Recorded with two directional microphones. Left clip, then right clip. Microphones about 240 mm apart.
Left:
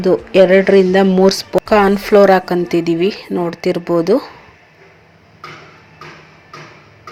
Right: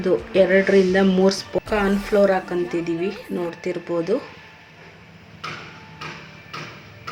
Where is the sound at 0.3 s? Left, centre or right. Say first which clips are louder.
Left 8 dB; left.